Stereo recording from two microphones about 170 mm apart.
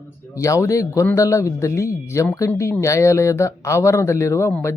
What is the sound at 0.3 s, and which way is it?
A woman's voice, 20° left (ahead or behind).